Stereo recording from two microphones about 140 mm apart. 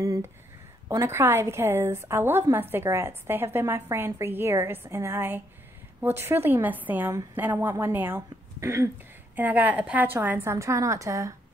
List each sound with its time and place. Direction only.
0.0 s a woman's voice: 25° right (ahead or behind)